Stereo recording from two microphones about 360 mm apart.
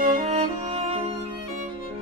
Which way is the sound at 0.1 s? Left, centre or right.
Centre.